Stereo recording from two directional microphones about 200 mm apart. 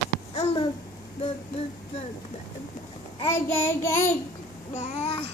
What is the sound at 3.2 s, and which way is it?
Child singing, 15° left (ahead or behind).